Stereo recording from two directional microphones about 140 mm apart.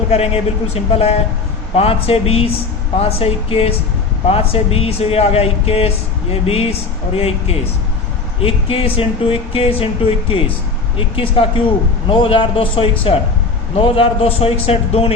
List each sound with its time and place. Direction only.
0.1 s speech: 45° left (ahead or behind)